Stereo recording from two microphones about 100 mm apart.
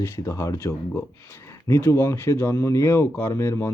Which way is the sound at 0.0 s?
30° left (ahead or behind).